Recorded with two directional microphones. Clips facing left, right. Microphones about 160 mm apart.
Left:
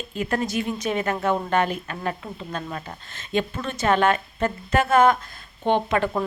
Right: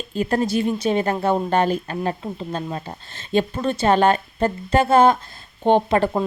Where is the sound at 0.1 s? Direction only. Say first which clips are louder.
Right 5 dB; 35° right (ahead or behind).